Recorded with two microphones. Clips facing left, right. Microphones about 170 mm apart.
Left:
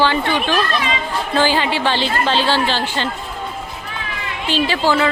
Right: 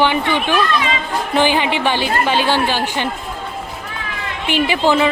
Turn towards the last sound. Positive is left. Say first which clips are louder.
# right 2 dB
turn(degrees=-15)  # may be behind; listen again after turning